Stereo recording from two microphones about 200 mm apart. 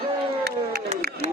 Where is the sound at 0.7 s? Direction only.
50° right (ahead or behind).